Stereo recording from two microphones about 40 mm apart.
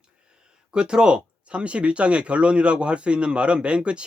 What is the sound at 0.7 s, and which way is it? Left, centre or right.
Speech, right.